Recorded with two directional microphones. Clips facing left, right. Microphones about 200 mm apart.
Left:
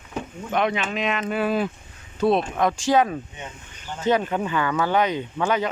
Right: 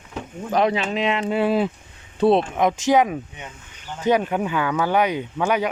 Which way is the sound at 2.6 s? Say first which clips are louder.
Right 2 dB; 20° right (ahead or behind).